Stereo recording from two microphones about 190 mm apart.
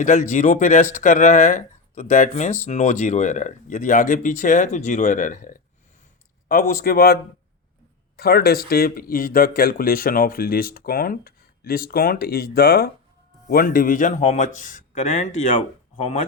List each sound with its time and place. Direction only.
0.0 s a man's voice: 45° left (ahead or behind)